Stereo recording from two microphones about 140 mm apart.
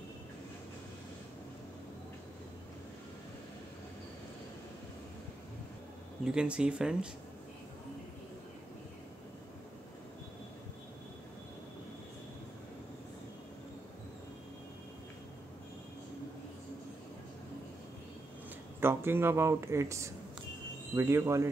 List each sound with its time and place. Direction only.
6.2 s speech: 5° right (ahead or behind)
18.8 s speech: 15° right (ahead or behind)